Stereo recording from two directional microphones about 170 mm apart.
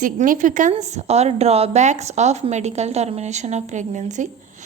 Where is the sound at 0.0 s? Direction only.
50° right (ahead or behind).